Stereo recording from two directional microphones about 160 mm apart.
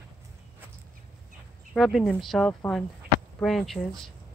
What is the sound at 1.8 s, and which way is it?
Speech, centre (ahead or behind).